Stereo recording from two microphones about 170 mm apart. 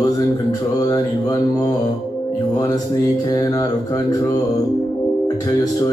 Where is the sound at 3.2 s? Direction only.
20° left (ahead or behind).